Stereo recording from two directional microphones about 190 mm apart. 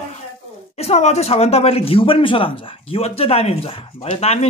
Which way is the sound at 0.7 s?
35° left (ahead or behind).